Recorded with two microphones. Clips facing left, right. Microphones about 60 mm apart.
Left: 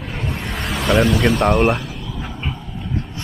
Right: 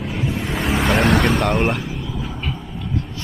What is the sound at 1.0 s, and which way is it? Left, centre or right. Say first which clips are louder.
Speech: even; right.